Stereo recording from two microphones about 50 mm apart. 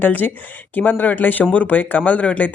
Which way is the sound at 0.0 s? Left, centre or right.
Left.